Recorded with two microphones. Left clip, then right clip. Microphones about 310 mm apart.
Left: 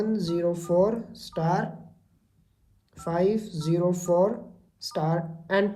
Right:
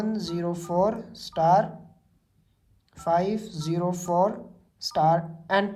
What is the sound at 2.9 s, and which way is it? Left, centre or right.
Speech, right.